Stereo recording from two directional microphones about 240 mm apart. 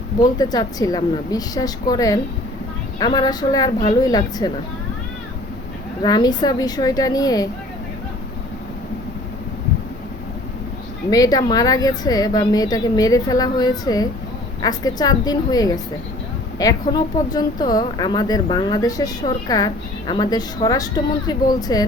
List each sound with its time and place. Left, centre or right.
0.2 s speech: centre
6.0 s speech: centre
11.1 s speech: centre